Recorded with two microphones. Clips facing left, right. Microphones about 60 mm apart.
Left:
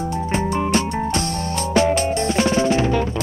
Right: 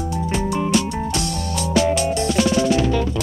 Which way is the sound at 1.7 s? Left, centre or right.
Left.